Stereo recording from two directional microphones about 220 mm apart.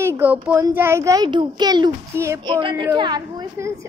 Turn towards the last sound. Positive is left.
turn(degrees=-15)  # may be behind; listen again after turning